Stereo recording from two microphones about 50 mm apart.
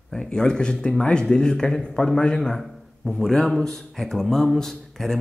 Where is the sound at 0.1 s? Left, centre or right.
Centre.